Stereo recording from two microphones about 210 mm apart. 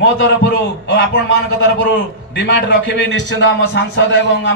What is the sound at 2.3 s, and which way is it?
A man's voice, 60° left (ahead or behind).